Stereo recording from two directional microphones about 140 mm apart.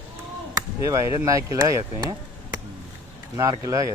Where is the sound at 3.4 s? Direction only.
25° right (ahead or behind).